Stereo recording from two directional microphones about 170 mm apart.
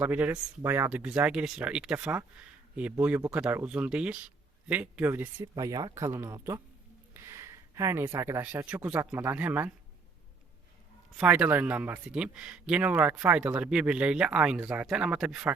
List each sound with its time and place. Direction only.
0.0 s speech: 10° right (ahead or behind)
11.2 s speech: 10° right (ahead or behind)